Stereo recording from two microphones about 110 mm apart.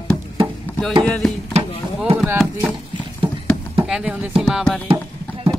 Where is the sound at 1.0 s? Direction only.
5° left (ahead or behind).